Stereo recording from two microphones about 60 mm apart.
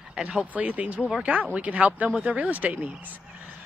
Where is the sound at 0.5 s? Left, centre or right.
Right.